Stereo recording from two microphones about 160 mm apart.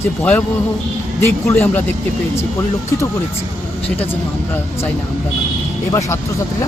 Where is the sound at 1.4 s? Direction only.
10° left (ahead or behind).